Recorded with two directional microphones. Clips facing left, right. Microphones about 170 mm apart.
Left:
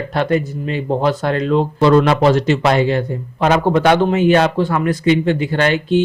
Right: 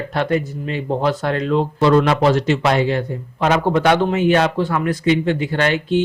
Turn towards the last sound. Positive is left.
turn(degrees=30)  # may be behind; listen again after turning